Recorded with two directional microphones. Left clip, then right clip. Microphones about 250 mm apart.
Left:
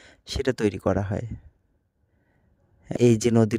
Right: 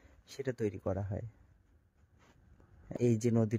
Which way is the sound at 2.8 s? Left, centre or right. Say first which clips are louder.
Left 12 dB; left.